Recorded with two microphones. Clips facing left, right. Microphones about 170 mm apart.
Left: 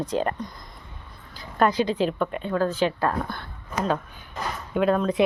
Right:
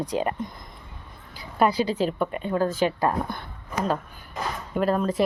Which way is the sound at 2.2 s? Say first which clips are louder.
Even; 10° right (ahead or behind).